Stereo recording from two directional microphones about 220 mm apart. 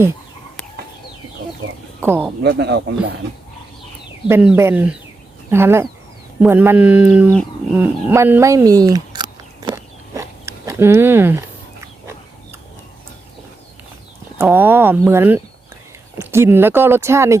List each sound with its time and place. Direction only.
2.0 s speech: 10° right (ahead or behind)
2.4 s speech: 50° right (ahead or behind)
4.3 s speech: 10° right (ahead or behind)
7.3 s bird: 5° right (ahead or behind)
14.3 s speech: 10° right (ahead or behind)